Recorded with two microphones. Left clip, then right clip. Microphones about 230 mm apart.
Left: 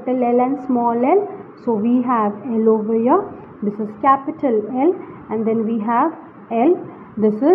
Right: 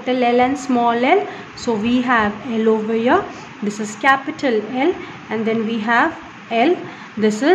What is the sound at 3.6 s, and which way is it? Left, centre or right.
A woman's voice, centre.